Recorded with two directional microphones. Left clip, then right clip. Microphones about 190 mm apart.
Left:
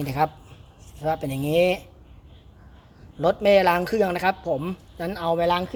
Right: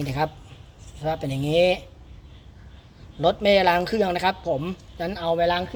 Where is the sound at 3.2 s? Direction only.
10° left (ahead or behind).